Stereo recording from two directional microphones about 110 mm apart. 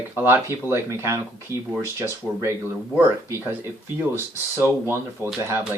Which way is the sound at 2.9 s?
20° right (ahead or behind).